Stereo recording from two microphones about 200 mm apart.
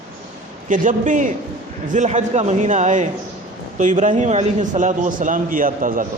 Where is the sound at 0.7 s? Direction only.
40° right (ahead or behind).